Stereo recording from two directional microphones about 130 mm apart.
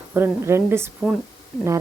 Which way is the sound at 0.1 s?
20° right (ahead or behind).